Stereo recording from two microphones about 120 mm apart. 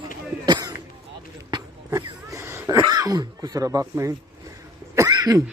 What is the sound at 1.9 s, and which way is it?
Throat clearing, 25° right (ahead or behind).